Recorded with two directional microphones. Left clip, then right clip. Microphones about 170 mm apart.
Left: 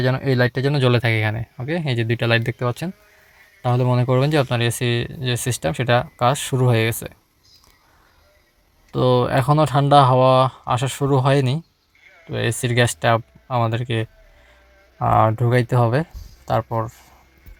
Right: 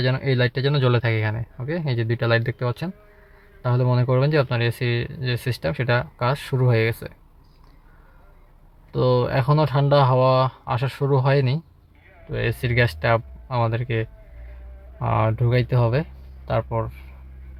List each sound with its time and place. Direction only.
0.0 s speech: 15° left (ahead or behind)
8.9 s speech: 20° left (ahead or behind)